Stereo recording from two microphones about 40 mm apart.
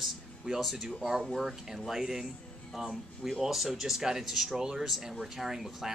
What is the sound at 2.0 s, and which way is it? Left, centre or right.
Speech, centre.